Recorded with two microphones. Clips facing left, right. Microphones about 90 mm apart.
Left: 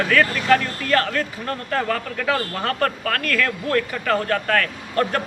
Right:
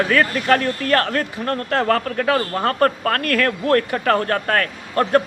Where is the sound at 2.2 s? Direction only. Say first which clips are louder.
Right 4 dB; 35° right (ahead or behind).